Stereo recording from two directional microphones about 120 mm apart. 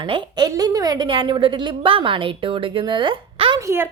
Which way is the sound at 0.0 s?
45° right (ahead or behind).